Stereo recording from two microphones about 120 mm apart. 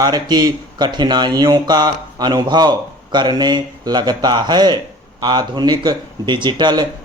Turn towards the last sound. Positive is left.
turn(degrees=-40)  # may be behind; listen again after turning